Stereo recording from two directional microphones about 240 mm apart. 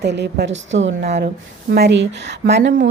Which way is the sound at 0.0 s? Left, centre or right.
Right.